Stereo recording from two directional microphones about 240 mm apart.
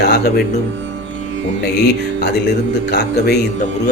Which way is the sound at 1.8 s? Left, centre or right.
Left.